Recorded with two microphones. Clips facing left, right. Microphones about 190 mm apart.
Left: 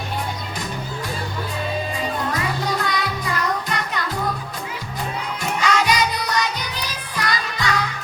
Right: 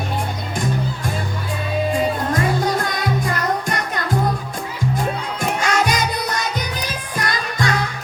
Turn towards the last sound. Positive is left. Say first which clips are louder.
# right 2 dB
turn(degrees=-50)  # may be behind; listen again after turning